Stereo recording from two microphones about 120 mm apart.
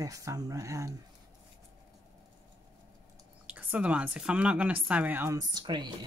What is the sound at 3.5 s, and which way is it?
Speech, 10° right (ahead or behind).